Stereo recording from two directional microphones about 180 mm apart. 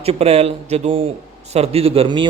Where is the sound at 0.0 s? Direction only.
35° right (ahead or behind).